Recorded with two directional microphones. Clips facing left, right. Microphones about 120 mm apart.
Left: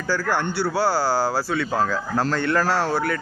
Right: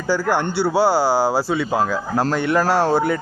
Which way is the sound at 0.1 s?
15° right (ahead or behind).